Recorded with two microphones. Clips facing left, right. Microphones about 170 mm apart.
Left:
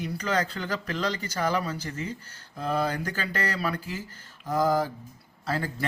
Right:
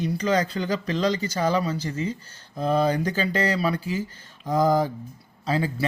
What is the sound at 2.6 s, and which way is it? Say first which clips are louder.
Speech: right 6 dB; 15° right (ahead or behind).